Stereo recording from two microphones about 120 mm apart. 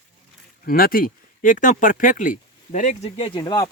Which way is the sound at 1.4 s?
90° left.